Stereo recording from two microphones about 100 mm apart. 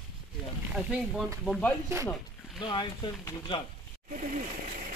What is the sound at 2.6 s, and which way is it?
Speech, 50° left (ahead or behind).